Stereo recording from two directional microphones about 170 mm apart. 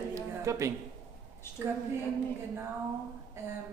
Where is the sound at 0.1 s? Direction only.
15° right (ahead or behind).